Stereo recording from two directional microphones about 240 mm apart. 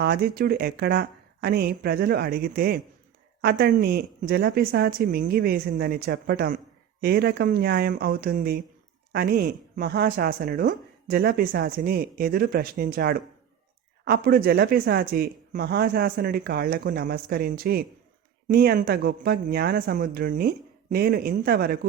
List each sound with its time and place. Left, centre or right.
0.0 s speech: right